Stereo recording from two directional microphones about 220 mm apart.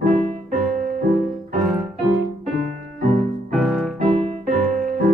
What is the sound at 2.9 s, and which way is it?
Music, 35° right (ahead or behind).